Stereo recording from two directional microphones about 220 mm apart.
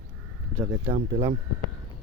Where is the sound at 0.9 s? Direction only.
25° right (ahead or behind).